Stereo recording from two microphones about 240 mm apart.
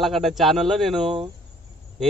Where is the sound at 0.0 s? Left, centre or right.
Centre.